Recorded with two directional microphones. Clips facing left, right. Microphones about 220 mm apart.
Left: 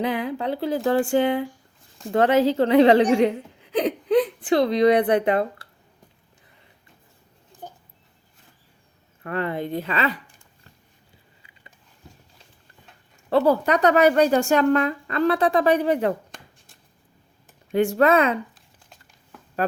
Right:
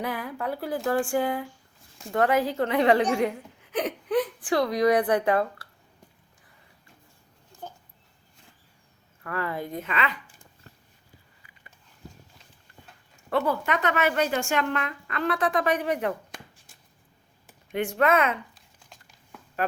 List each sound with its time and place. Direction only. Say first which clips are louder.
0.0 s a woman's voice: left 6 dB; 20° left (ahead or behind)
7.6 s dog: left 1 dB; 15° left (ahead or behind)
9.2 s speech: left 5 dB; 25° left (ahead or behind)
13.3 s speech: left 7 dB; 35° left (ahead or behind)
16.3 s shuffling cards: right 1 dB; centre (ahead or behind)
17.7 s speech: left 5 dB; 35° left (ahead or behind)
18.5 s crumpling: left 1 dB; centre (ahead or behind)